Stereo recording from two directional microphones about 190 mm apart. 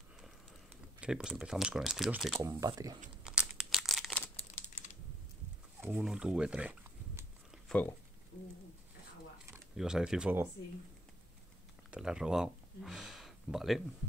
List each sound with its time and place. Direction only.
1.0 s speech: 5° right (ahead or behind)
2.4 s speech: 15° right (ahead or behind)
3.3 s crumpling: 5° right (ahead or behind)
4.6 s typing: 40° left (ahead or behind)
5.8 s speech: 10° right (ahead or behind)
7.6 s a sound: 5° left (ahead or behind)
9.5 s speech: 5° right (ahead or behind)
11.9 s a sound: 5° right (ahead or behind)